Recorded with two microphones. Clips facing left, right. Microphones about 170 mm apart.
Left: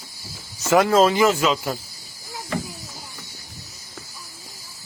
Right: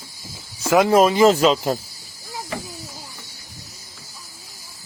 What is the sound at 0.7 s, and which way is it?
Speech, 15° right (ahead or behind).